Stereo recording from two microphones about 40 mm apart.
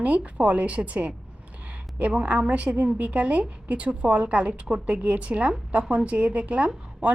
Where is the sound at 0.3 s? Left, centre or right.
Right.